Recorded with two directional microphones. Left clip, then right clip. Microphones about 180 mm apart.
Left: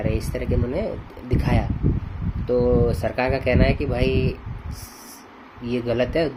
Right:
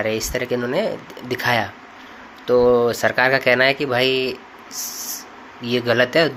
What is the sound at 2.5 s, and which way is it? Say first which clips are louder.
Speech: right 5 dB; 15° right (ahead or behind).